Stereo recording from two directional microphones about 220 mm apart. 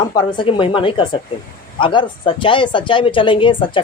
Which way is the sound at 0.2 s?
20° left (ahead or behind).